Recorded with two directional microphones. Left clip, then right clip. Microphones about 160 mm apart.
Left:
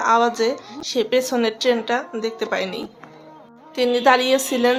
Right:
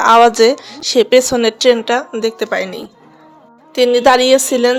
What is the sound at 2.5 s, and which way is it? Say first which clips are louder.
Speech: right 5 dB; 25° right (ahead or behind).